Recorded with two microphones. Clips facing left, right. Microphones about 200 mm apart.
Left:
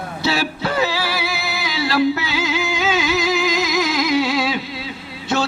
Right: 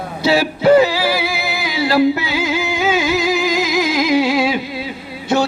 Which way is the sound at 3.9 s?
25° right (ahead or behind).